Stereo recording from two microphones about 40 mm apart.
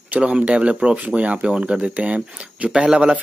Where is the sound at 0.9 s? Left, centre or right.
Right.